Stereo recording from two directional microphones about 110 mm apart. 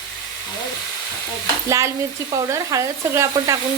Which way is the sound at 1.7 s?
30° right (ahead or behind).